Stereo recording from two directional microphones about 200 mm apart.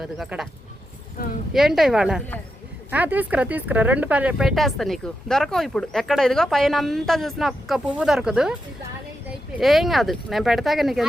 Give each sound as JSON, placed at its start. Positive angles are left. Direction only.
{"t": 0.0, "sound": "speech", "side_deg": 0}
{"t": 1.5, "sound": "speech", "side_deg": 0}
{"t": 9.6, "sound": "speech", "side_deg": 0}